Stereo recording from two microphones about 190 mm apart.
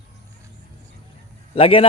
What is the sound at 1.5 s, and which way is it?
Speech, 30° left (ahead or behind).